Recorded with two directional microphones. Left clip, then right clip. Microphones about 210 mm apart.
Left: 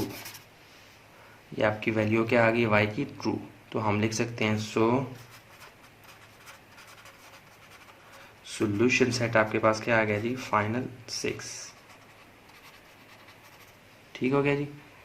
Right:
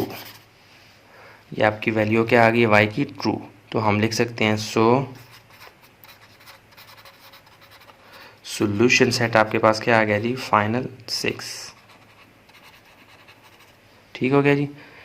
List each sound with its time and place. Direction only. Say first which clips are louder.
1.5 s speech: right 7 dB; 35° right (ahead or behind)
8.4 s speech: right 7 dB; 45° right (ahead or behind)
14.1 s a man's voice: right 7 dB; 40° right (ahead or behind)